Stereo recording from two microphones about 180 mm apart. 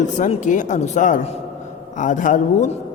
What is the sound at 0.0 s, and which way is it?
A woman's voice, 40° left (ahead or behind).